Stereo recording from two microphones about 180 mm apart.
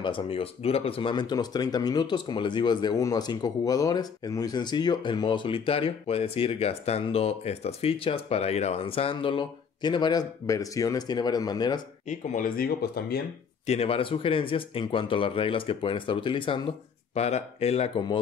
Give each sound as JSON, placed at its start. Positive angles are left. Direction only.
{"t": 0.0, "sound": "speech", "side_deg": 30}
{"t": 12.1, "sound": "speech", "side_deg": 45}
{"t": 13.7, "sound": "speech", "side_deg": 35}